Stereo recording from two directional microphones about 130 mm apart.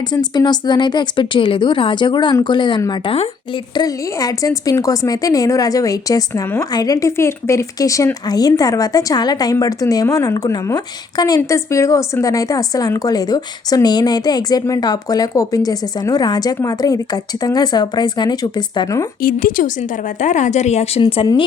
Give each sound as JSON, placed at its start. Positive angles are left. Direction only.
{"t": 0.1, "sound": "speech", "side_deg": 35}
{"t": 19.2, "sound": "a woman's voice", "side_deg": 90}
{"t": 20.1, "sound": "a woman's voice", "side_deg": 70}